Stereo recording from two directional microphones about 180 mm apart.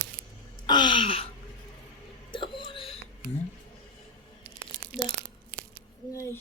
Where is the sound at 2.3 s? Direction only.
25° left (ahead or behind).